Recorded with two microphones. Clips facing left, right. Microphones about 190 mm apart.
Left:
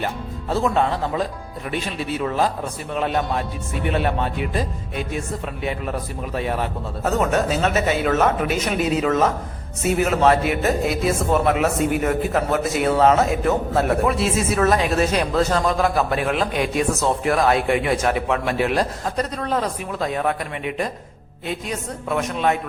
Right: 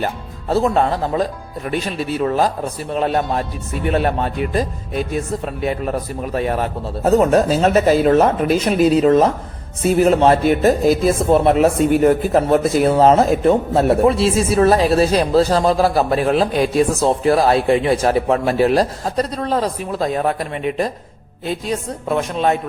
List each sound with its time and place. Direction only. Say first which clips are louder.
0.0 s speech: right 3 dB; 35° right (ahead or behind)